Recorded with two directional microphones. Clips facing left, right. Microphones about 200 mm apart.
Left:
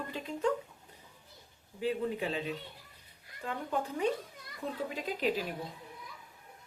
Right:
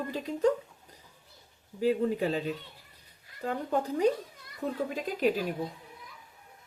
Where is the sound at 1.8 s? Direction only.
40° right (ahead or behind).